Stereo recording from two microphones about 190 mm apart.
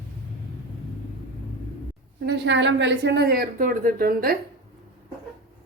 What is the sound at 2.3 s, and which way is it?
A woman's voice, 65° right (ahead or behind).